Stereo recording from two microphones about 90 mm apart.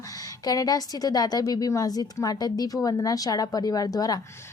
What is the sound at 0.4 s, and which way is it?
A woman's voice, 45° left (ahead or behind).